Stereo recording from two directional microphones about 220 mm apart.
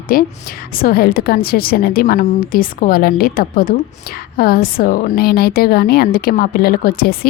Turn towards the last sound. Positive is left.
turn(degrees=45)  # may be behind; listen again after turning